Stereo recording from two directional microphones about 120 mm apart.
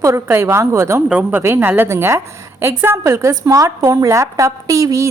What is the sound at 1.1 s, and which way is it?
A woman's voice, 10° right (ahead or behind).